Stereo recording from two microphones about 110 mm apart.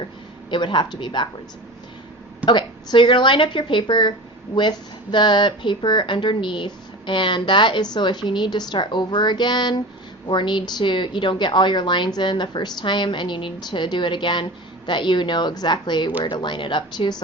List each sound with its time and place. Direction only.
0.5 s speech: 45° left (ahead or behind)
2.5 s speech: 45° left (ahead or behind)
5.1 s speech: 45° left (ahead or behind)